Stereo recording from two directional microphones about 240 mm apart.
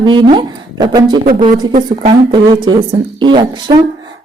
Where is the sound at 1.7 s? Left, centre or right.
Right.